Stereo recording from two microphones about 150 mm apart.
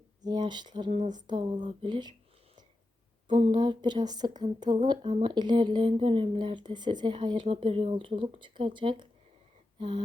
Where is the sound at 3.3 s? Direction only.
35° right (ahead or behind).